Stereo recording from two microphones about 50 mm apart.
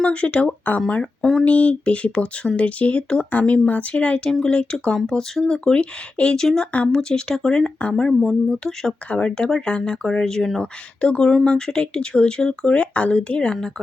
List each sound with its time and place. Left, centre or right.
0.0 s speech: left
1.2 s speech: centre
1.5 s speech: left; by 5.7 s centre
5.7 s speech: left
6.3 s speech: centre